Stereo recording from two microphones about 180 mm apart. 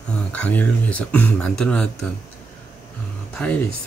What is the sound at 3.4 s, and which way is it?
Speech, 5° left (ahead or behind).